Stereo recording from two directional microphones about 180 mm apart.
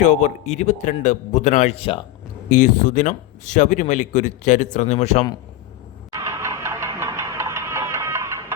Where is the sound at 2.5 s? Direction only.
45° left (ahead or behind).